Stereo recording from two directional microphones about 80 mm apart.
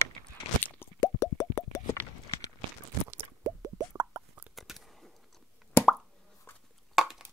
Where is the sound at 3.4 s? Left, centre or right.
Right.